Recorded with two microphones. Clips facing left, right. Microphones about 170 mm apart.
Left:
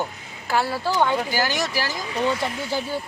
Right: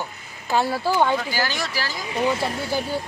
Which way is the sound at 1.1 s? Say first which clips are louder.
Left 2 dB; 15° left (ahead or behind).